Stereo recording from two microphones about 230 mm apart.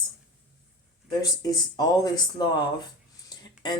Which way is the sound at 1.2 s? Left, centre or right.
Centre.